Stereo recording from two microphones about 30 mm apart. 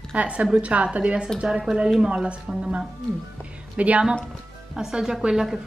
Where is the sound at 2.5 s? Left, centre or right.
Right.